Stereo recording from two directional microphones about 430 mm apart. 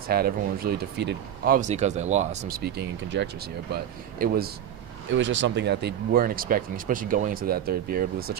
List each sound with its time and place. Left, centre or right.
0.1 s speech: centre